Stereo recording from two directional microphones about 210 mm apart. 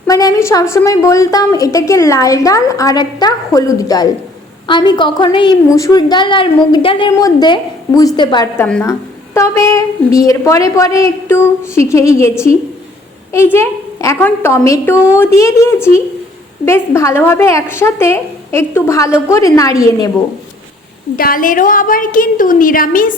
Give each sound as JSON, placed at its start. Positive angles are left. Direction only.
{"t": 0.1, "sound": "a woman's voice", "side_deg": 15}
{"t": 13.3, "sound": "a woman's voice", "side_deg": 10}
{"t": 21.2, "sound": "a woman's voice", "side_deg": 40}